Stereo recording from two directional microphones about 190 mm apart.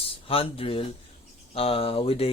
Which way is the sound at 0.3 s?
30° left (ahead or behind).